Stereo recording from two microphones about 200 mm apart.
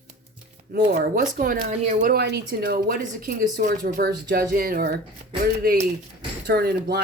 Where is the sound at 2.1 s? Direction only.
55° right (ahead or behind).